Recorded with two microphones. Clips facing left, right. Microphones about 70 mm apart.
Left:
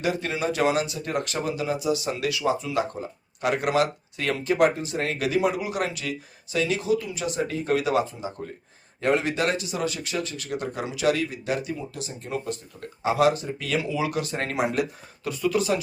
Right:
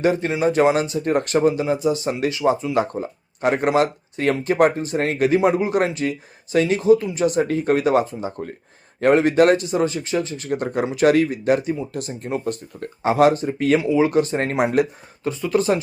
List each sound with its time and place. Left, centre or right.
0.0 s speech: right
13.7 s speech: right
15.2 s speech: right